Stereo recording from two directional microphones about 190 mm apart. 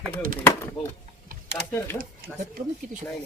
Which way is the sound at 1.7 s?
10° left (ahead or behind).